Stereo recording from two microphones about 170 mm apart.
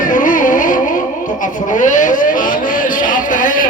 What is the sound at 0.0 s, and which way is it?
Music, 50° left (ahead or behind).